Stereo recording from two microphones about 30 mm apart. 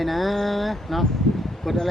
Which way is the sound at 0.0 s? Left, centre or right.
Centre.